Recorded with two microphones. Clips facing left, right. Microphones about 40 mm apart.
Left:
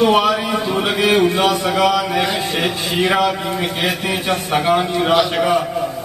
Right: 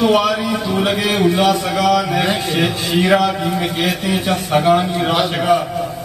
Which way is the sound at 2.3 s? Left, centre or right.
Centre.